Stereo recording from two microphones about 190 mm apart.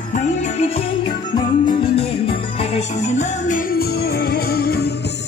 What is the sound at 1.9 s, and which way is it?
Music, 30° left (ahead or behind).